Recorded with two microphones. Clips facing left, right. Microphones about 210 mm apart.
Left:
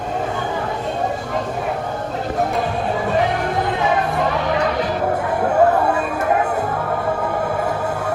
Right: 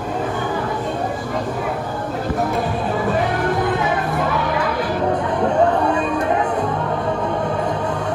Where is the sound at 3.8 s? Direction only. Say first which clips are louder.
Left 1 dB; 25° left (ahead or behind).